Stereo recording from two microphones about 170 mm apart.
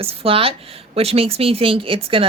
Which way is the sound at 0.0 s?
35° right (ahead or behind).